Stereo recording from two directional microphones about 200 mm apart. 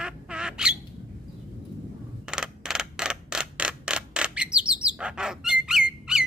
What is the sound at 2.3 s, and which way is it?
Mechanisms, 5° right (ahead or behind).